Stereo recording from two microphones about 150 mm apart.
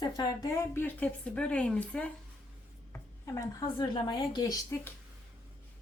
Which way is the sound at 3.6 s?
30° left (ahead or behind).